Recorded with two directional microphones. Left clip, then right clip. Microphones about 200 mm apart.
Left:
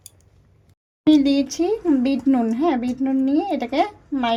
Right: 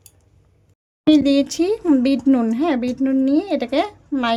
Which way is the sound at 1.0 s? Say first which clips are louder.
Right 2 dB; 15° right (ahead or behind).